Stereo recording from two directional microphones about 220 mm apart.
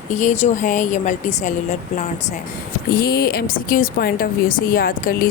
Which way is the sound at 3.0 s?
45° left (ahead or behind).